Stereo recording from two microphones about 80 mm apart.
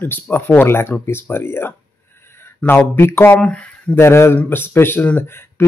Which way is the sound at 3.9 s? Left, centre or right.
Left.